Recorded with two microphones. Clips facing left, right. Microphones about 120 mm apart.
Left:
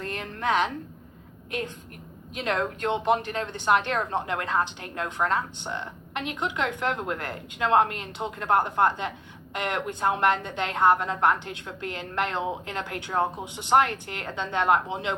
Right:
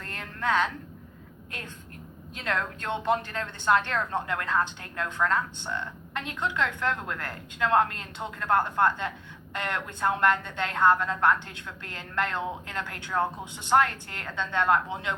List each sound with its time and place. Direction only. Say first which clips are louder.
0.0 s a woman's voice: left 2 dB; 20° left (ahead or behind)